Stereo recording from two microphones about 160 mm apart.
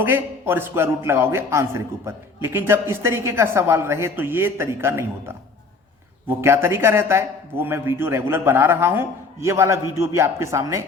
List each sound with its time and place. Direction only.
0.0 s a man's voice: 15° right (ahead or behind)
6.2 s a man's voice: 15° right (ahead or behind)